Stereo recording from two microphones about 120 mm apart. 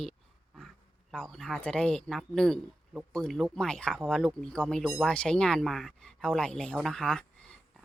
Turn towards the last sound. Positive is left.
turn(degrees=5)  # may be behind; listen again after turning